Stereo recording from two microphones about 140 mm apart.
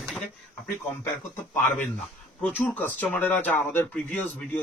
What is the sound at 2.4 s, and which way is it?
Speech, 10° left (ahead or behind).